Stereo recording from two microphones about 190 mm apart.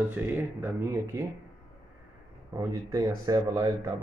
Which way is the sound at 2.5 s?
20° right (ahead or behind).